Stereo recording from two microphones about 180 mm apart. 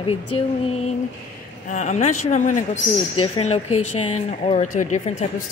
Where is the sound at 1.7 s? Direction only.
40° left (ahead or behind).